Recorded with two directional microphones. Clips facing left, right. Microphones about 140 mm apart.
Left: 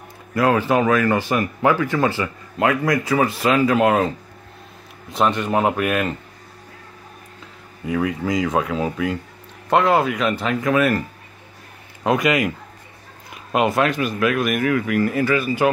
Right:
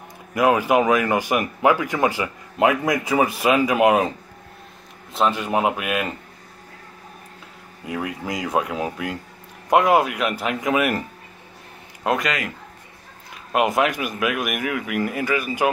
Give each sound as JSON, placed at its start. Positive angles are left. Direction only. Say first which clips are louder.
{"t": 0.3, "sound": "speech", "louder": "even", "side_deg": -15}
{"t": 5.1, "sound": "speech", "louder": "left 2 dB", "side_deg": -5}
{"t": 7.8, "sound": "speech", "louder": "left 6 dB", "side_deg": -5}
{"t": 12.0, "sound": "speech", "louder": "left 3 dB", "side_deg": 0}
{"t": 13.7, "sound": "speech", "louder": "left 2 dB", "side_deg": -15}